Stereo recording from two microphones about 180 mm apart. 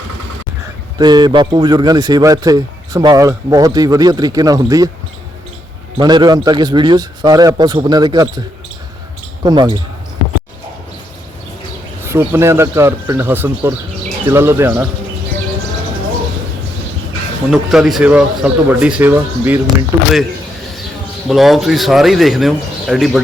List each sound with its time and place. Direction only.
0.9 s a man's voice: 25° right (ahead or behind)
6.0 s a man's voice: 25° right (ahead or behind)
12.0 s speech: 15° right (ahead or behind)
17.5 s speech: centre (ahead or behind)
21.2 s a man's voice: centre (ahead or behind)